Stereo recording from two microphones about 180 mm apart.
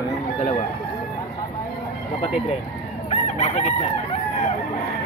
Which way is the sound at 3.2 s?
40° left (ahead or behind).